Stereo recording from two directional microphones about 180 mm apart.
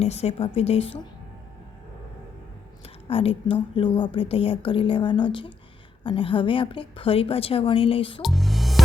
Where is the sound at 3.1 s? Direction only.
30° left (ahead or behind).